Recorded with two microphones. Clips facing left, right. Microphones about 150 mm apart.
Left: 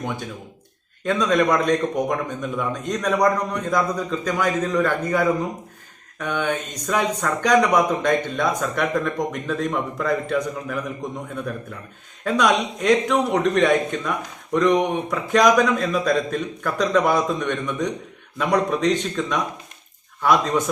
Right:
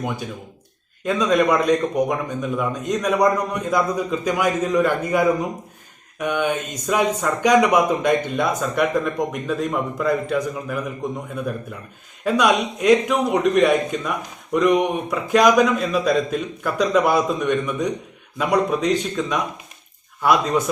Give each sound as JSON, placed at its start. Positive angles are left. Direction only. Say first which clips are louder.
{"t": 1.0, "sound": "a man's voice", "louder": "right 1 dB", "side_deg": -5}
{"t": 12.2, "sound": "speech", "louder": "right 1 dB", "side_deg": -5}